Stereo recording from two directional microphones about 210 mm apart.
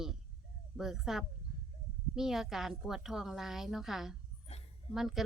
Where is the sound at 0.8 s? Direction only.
Centre (ahead or behind).